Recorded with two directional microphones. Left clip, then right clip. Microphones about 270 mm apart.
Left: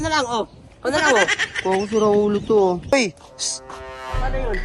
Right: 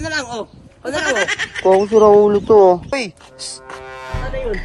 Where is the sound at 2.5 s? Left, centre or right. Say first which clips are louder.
Right 8 dB; right.